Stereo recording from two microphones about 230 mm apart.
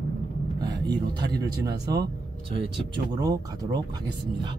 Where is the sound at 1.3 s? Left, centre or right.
Centre.